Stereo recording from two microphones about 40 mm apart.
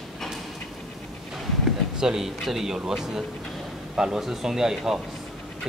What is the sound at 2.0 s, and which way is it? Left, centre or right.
Speech, centre.